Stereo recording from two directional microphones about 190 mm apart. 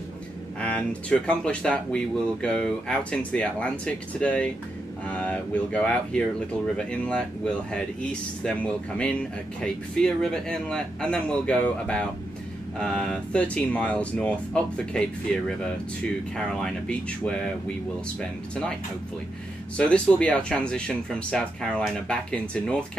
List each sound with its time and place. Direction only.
0.6 s speech: 5° left (ahead or behind)
19.8 s speech: 5° left (ahead or behind)